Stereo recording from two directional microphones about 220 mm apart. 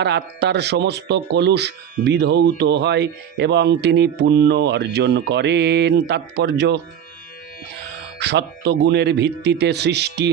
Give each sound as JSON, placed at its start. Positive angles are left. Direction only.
{"t": 0.0, "sound": "speech", "side_deg": -50}
{"t": 8.2, "sound": "speech", "side_deg": -50}